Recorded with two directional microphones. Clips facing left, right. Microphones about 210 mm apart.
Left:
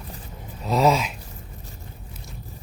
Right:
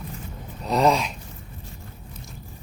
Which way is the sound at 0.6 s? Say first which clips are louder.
Even; centre (ahead or behind).